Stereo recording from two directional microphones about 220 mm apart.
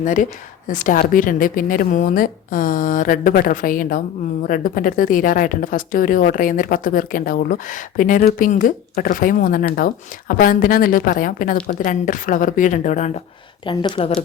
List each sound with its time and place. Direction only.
0.0 s a woman's voice: 35° left (ahead or behind)
13.7 s speech: 20° left (ahead or behind)